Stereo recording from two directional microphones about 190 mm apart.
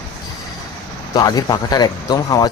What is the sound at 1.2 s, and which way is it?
Speech, 20° left (ahead or behind).